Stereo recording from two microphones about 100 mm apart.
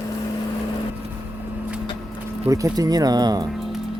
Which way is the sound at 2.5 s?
40° right (ahead or behind).